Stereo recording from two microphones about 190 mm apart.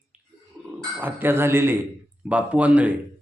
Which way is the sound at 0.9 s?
10° right (ahead or behind).